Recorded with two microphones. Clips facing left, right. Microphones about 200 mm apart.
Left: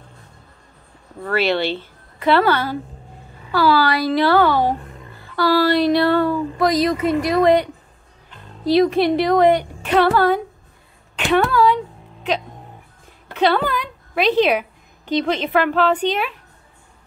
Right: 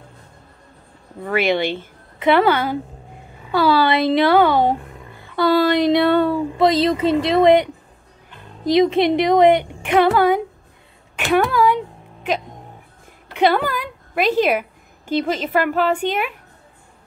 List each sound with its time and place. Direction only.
1.2 s a woman's voice: 15° right (ahead or behind)
11.1 s sneeze: 10° right (ahead or behind)
13.3 s a woman's voice: 15° right (ahead or behind)
13.7 s a sound: 10° right (ahead or behind)
14.4 s a woman's voice: 5° right (ahead or behind)